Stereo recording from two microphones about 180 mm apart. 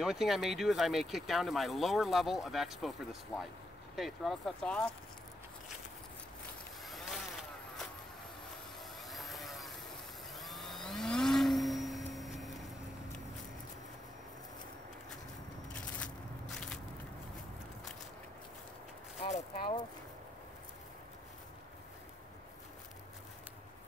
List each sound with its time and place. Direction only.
0.0 s speech: centre (ahead or behind)
6.9 s vehicle: centre (ahead or behind)
9.1 s vehicle: centre (ahead or behind)
10.3 s vacuum cleaner: centre (ahead or behind)
16.5 s biting: 5° left (ahead or behind)
19.2 s a sound: 35° left (ahead or behind)